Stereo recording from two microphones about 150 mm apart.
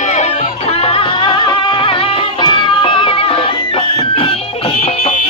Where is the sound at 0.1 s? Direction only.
45° left (ahead or behind).